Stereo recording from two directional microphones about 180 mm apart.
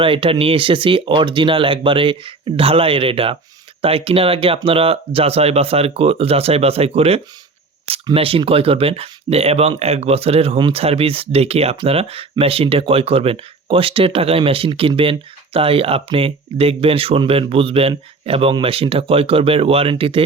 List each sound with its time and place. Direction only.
0.0 s speech: 30° right (ahead or behind)